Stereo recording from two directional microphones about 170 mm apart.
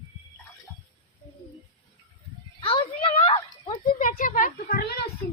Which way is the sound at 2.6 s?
30° left (ahead or behind).